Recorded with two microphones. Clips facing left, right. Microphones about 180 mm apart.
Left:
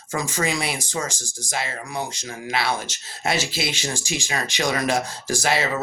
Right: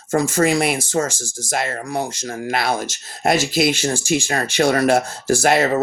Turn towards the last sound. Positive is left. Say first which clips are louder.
# right 7 dB
turn(degrees=-55)  # may be behind; listen again after turning